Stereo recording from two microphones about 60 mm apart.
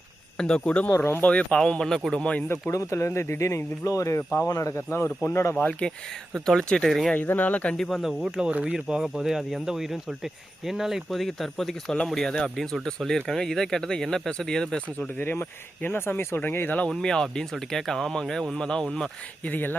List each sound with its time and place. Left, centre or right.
0.3 s speech: centre
0.9 s speech: left
1.2 s speech: left
2.7 s speech: left
4.2 s speech: left
4.4 s speech: left
4.7 s speech: left
5.5 s speech: left
7.2 s speech: left
7.8 s speech: centre
8.4 s speech: centre
14.9 s speech: left
16.9 s speech: centre
19.5 s speech: left